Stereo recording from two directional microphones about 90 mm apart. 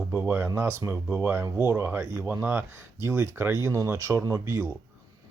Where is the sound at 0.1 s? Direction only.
20° right (ahead or behind).